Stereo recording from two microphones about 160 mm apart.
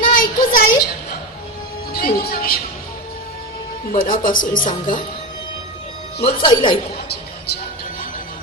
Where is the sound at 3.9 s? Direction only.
60° left (ahead or behind).